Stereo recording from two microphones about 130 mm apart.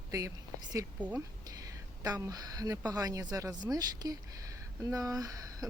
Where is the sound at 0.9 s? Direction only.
10° right (ahead or behind).